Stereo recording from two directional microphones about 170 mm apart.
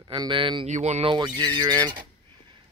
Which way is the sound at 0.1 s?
30° right (ahead or behind).